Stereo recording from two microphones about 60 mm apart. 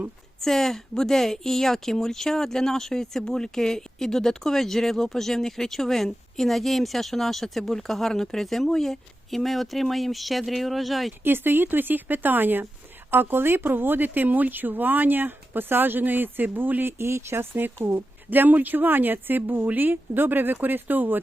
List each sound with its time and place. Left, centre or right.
0.4 s speech: centre
11.2 s speech: right
17.0 s speech: right